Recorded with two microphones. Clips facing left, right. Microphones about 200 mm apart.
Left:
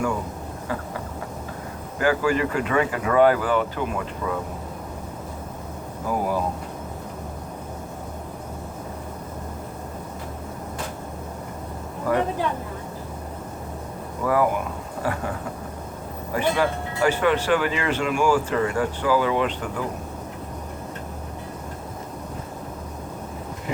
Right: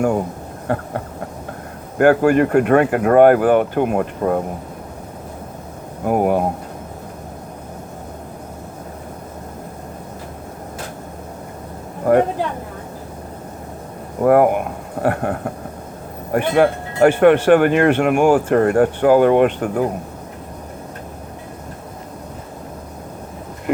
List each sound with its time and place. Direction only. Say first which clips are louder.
0.7 s speech: right 8 dB; 60° right (ahead or behind)
2.0 s speech: right 9 dB; 55° right (ahead or behind)
6.1 s speech: right 8 dB; 60° right (ahead or behind)
14.2 s a sound: right 9 dB; 55° right (ahead or behind)
16.3 s speech: right 7 dB; 55° right (ahead or behind)